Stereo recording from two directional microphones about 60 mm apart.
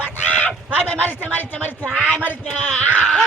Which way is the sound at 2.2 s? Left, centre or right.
Left.